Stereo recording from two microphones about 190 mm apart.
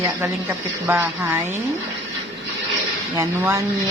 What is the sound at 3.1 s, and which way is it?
Speech, 15° right (ahead or behind).